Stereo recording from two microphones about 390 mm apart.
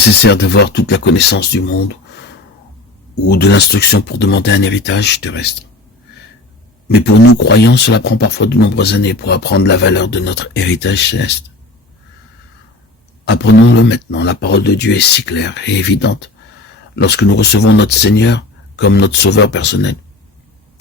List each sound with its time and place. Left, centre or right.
0.2 s speech: left
3.2 s speech: left
6.8 s speech: left
13.2 s speech: left